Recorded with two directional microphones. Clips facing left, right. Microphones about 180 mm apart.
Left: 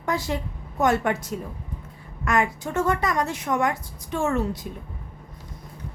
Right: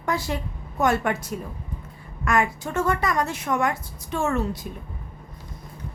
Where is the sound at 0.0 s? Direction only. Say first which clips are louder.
Even; 20° left (ahead or behind).